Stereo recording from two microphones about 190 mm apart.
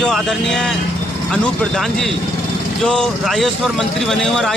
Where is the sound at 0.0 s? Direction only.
Centre (ahead or behind).